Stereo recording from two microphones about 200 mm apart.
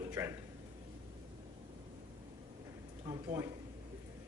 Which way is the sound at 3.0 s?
15° right (ahead or behind).